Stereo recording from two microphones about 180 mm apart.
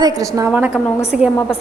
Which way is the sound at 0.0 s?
20° right (ahead or behind).